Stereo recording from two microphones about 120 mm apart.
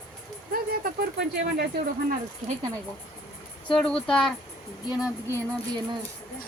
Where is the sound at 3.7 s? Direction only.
5° left (ahead or behind).